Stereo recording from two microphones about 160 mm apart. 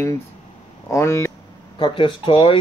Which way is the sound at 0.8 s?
20° left (ahead or behind).